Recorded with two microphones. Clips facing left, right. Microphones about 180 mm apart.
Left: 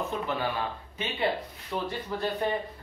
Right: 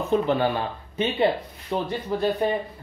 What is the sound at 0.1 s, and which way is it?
Speech, 30° right (ahead or behind).